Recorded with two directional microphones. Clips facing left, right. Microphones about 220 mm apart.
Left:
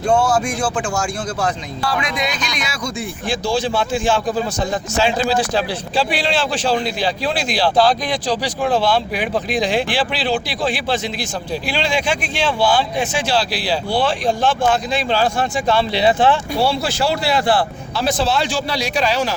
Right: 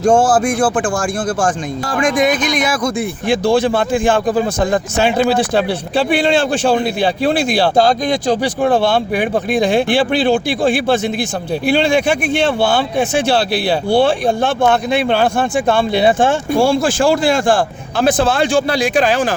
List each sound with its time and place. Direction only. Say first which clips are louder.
0.0 s speech: right 5 dB; 45° right (ahead or behind)